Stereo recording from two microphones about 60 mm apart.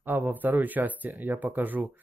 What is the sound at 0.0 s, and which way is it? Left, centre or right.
Speech, right.